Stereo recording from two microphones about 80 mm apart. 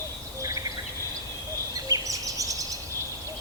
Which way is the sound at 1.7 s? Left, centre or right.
Right.